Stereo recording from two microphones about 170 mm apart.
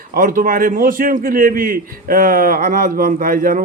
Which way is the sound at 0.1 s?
55° right (ahead or behind).